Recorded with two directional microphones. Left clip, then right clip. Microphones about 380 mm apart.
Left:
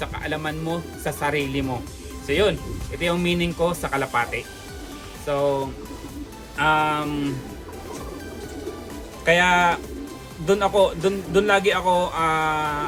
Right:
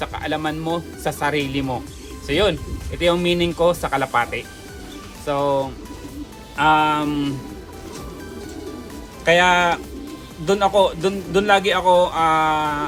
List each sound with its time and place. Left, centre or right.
0.0 s speech: centre
6.6 s speech: centre
9.2 s speech: centre